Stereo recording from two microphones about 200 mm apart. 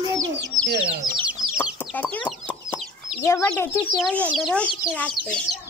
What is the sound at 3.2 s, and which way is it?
A child's voice, 15° left (ahead or behind).